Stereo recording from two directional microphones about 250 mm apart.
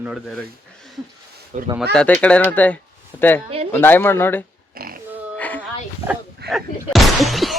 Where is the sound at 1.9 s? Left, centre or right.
Centre.